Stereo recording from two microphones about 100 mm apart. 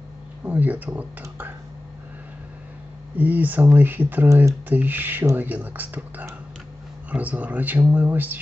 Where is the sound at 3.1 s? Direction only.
15° right (ahead or behind).